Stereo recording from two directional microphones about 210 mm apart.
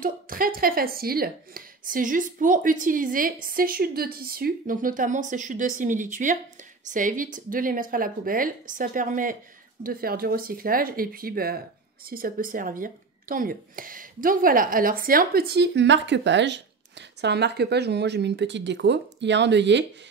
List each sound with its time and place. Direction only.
0.0 s a woman's voice: 45° right (ahead or behind)